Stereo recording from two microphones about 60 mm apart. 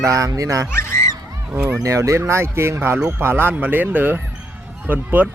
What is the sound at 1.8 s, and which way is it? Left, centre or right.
Speech, right.